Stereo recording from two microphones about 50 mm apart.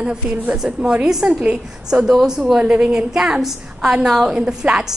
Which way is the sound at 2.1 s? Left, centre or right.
Centre.